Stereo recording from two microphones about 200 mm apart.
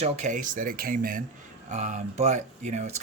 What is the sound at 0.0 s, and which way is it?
Speech, 35° right (ahead or behind).